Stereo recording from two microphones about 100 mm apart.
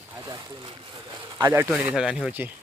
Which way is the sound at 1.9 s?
5° right (ahead or behind).